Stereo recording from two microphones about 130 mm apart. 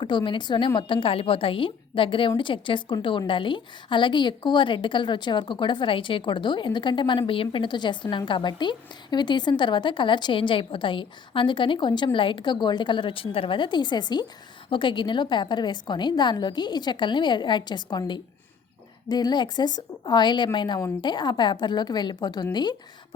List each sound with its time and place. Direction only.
0.0 s a woman's voice: 35° left (ahead or behind)